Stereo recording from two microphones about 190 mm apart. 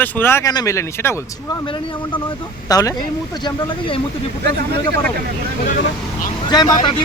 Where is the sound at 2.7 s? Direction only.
20° left (ahead or behind).